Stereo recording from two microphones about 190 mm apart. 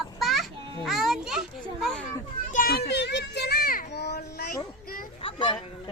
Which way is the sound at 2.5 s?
50° left (ahead or behind).